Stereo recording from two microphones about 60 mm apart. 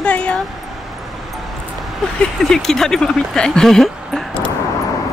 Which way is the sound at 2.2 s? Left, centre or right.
Centre.